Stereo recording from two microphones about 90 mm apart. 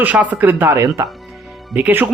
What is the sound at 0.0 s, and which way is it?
A man's voice, 15° right (ahead or behind).